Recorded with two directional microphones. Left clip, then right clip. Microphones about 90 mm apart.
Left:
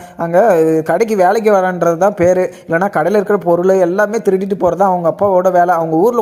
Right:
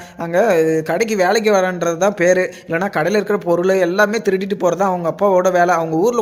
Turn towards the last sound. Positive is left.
turn(degrees=40)  # may be behind; listen again after turning